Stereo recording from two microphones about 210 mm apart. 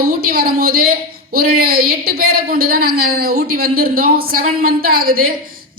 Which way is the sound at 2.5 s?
45° right (ahead or behind).